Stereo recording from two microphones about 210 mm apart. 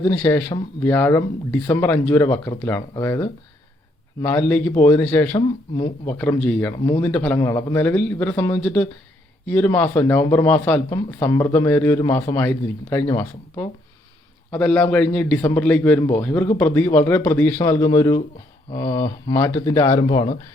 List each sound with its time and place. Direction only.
0.0 s speech: 10° left (ahead or behind)